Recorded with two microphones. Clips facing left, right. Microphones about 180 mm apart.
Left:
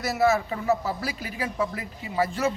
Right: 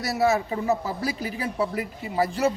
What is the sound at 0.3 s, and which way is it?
Speech, 20° right (ahead or behind).